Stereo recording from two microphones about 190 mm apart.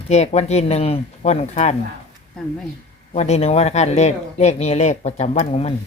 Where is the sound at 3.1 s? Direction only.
35° left (ahead or behind).